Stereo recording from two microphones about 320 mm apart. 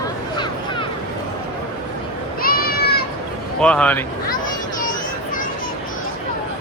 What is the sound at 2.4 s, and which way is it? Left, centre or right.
Goat, left.